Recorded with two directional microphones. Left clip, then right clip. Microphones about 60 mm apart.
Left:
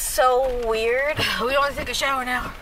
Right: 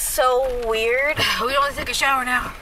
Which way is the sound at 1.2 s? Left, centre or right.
Right.